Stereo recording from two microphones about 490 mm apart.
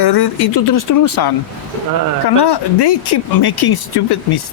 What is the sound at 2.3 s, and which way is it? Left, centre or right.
Speech, left.